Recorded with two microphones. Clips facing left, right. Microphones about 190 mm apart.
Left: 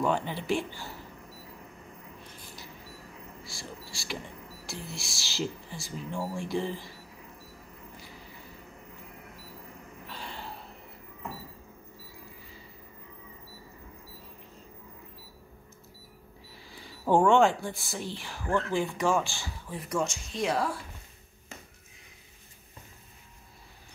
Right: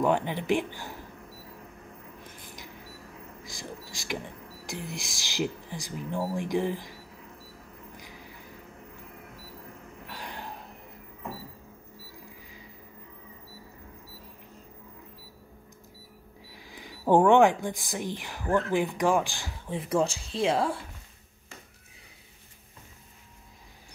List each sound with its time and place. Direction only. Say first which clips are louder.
0.0 s speech: right 3 dB; 15° right (ahead or behind)
3.4 s speech: right 4 dB; 15° right (ahead or behind)
10.0 s a sound: right 1 dB; 15° right (ahead or behind)
16.5 s speech: right 3 dB; 15° right (ahead or behind)